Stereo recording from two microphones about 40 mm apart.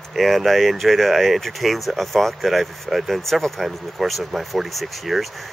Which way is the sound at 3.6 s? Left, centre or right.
Centre.